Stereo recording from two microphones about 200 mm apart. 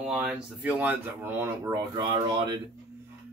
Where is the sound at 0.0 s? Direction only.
Centre (ahead or behind).